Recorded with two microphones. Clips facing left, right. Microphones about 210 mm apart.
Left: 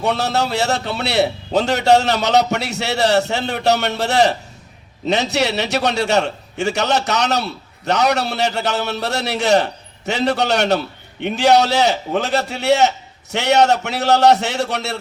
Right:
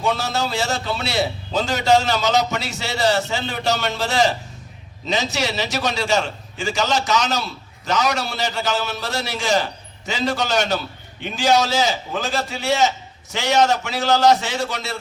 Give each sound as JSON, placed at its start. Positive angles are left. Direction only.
{"t": 0.0, "sound": "a man's voice", "side_deg": 65}